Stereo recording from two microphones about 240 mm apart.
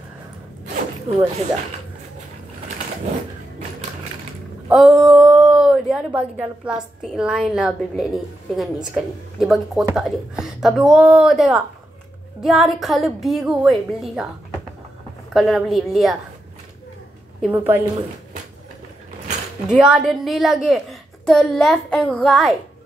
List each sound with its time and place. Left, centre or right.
1.1 s speech: right
4.6 s a woman's voice: centre
15.3 s a woman's voice: centre
17.4 s a woman's voice: centre
19.7 s a woman's voice: centre